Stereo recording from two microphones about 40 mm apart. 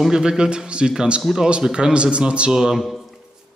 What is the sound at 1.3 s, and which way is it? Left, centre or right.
Speech, centre.